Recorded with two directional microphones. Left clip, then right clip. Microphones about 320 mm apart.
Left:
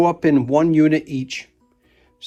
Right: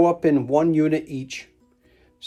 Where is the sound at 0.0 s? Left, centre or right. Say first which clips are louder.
Left 2 dB; left.